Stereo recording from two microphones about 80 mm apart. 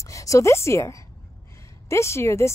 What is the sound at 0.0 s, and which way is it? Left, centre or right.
A woman's voice, left.